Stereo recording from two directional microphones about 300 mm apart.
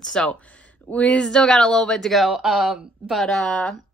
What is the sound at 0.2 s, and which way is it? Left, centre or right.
A woman's voice, centre.